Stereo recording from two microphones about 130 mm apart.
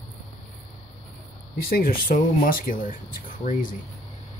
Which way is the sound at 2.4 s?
90° left.